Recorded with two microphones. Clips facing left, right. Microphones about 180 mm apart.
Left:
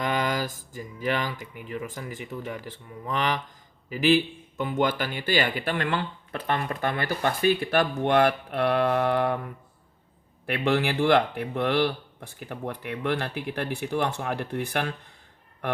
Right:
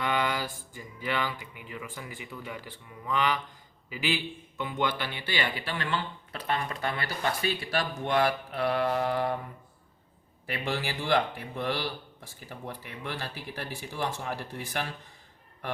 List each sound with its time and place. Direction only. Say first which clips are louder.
0.0 s speech: left 3 dB; 40° left (ahead or behind); by 9.4 s 60° left (ahead or behind)
10.4 s speech: left 8 dB; 60° left (ahead or behind)